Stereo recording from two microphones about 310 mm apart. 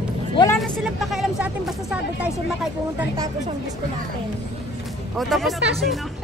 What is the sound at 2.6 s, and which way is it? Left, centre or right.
Speech, centre.